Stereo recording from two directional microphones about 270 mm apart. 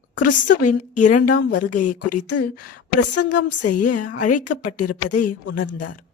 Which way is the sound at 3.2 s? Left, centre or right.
Left.